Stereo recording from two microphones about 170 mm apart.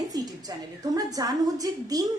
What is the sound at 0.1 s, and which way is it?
A woman's voice, 20° right (ahead or behind).